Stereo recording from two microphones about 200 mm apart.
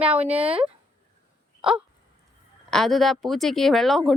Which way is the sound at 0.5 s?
25° right (ahead or behind).